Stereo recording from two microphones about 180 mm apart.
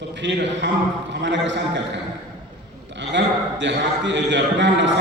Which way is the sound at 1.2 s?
80° right.